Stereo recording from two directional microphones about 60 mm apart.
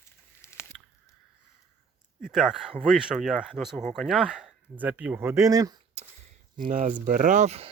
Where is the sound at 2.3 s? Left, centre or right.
Centre; by 5.1 s right.